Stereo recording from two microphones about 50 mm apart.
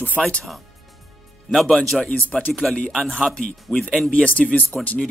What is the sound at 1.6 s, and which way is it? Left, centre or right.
Speech, centre.